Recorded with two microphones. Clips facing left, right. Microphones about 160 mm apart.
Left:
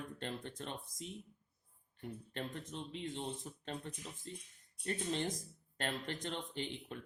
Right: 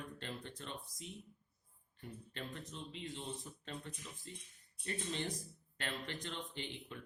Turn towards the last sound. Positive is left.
turn(degrees=45)  # may be behind; listen again after turning